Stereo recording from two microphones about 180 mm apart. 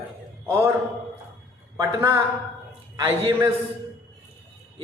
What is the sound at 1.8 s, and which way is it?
A man's voice, 15° right (ahead or behind).